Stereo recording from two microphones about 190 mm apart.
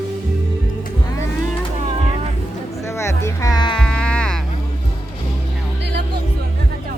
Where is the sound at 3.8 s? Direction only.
5° left (ahead or behind).